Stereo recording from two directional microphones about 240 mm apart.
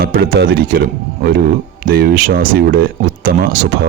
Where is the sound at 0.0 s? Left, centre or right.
Right.